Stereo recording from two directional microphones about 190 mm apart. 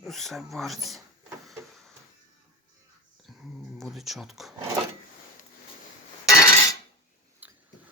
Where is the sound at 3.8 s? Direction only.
Centre (ahead or behind).